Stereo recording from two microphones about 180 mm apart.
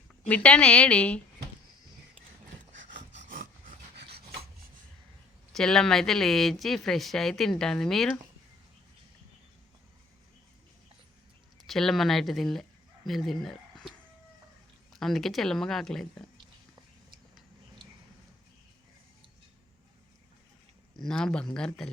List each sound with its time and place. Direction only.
0.3 s a woman's voice: 5° left (ahead or behind)
3.2 s rub: 45° right (ahead or behind)
3.9 s filing: 65° right (ahead or behind)
5.5 s speech: 5° left (ahead or behind)
11.6 s speech: centre (ahead or behind)
14.9 s speech: centre (ahead or behind)
20.9 s speech: 5° left (ahead or behind)